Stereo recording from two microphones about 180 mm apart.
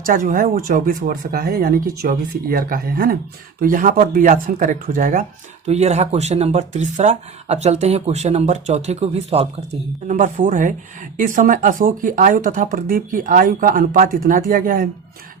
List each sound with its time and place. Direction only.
0.1 s speech: 50° right (ahead or behind)
10.1 s speech: 45° right (ahead or behind)